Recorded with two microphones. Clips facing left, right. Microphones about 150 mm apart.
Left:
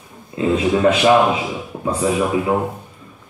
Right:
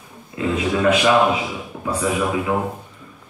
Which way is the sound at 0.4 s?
30° left (ahead or behind).